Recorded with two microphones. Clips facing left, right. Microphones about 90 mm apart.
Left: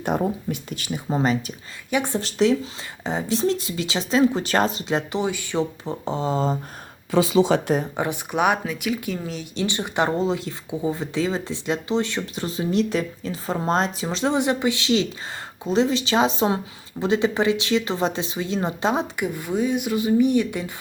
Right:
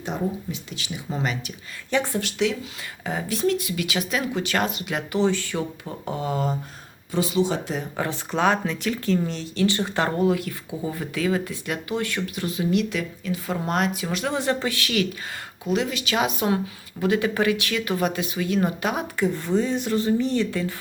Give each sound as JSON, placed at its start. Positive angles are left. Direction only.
{"t": 0.0, "sound": "speech", "side_deg": 55}
{"t": 1.9, "sound": "speech", "side_deg": 15}
{"t": 2.1, "sound": "speech", "side_deg": 35}
{"t": 3.0, "sound": "speech", "side_deg": 25}
{"t": 5.2, "sound": "speech", "side_deg": 15}
{"t": 7.1, "sound": "speech", "side_deg": 90}
{"t": 7.9, "sound": "speech", "side_deg": 15}
{"t": 9.4, "sound": "speech", "side_deg": 20}
{"t": 19.2, "sound": "speech", "side_deg": 10}